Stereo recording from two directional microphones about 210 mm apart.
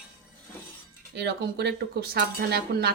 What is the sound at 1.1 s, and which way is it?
Speech, 55° right (ahead or behind).